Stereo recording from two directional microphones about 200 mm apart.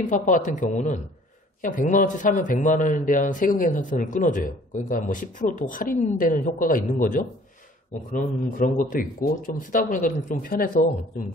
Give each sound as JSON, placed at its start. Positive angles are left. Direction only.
{"t": 0.4, "sound": "a man's voice", "side_deg": 40}